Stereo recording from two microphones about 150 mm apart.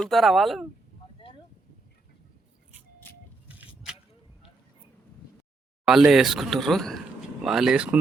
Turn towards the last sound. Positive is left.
turn(degrees=-5)  # may be behind; listen again after turning